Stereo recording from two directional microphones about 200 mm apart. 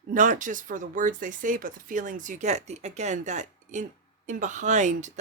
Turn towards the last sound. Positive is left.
turn(degrees=-35)  # may be behind; listen again after turning